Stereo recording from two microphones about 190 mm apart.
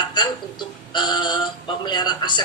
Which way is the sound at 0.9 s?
25° left (ahead or behind).